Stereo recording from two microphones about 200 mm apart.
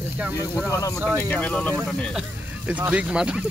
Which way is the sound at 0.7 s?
15° left (ahead or behind).